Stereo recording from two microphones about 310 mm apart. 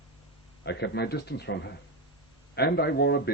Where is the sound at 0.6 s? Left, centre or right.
Left.